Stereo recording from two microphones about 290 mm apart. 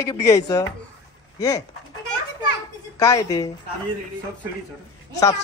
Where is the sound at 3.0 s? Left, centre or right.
Centre.